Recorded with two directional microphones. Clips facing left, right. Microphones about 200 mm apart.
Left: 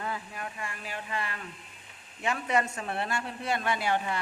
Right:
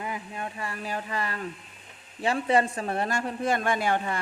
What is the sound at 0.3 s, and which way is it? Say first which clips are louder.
Speech: right 4 dB; 30° right (ahead or behind).